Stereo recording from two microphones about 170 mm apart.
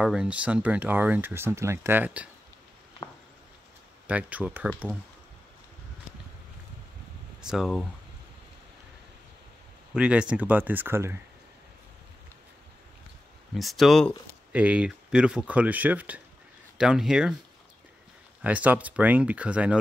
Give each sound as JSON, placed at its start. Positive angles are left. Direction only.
{"t": 0.0, "sound": "speech", "side_deg": -5}
{"t": 3.0, "sound": "a sound", "side_deg": 25}
{"t": 4.1, "sound": "speech", "side_deg": -10}
{"t": 7.4, "sound": "speech", "side_deg": 0}
{"t": 9.9, "sound": "speech", "side_deg": -5}
{"t": 13.6, "sound": "speech", "side_deg": 0}
{"t": 14.5, "sound": "speech", "side_deg": -10}
{"t": 18.4, "sound": "speech", "side_deg": -10}